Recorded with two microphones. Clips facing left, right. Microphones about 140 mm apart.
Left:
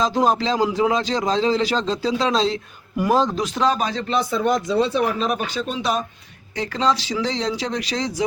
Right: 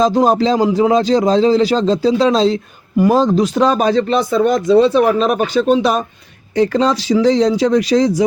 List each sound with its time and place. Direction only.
0.0 s a man's voice: 40° right (ahead or behind)
3.6 s speech: 55° right (ahead or behind)
4.2 s speech: 90° right; by 6.1 s 60° right (ahead or behind)
6.6 s speech: 50° right (ahead or behind)